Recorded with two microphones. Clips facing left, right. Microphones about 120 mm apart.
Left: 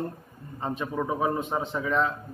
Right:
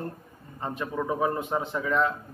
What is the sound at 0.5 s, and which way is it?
A man's voice, 20° left (ahead or behind).